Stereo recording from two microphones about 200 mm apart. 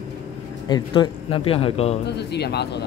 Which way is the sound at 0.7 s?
20° left (ahead or behind).